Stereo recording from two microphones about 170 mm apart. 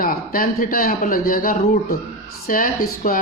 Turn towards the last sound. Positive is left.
turn(degrees=55)  # may be behind; listen again after turning